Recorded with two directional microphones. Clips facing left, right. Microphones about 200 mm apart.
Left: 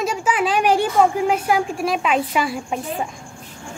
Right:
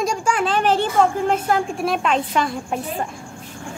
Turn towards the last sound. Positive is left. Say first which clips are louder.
# even
turn(degrees=5)  # may be behind; listen again after turning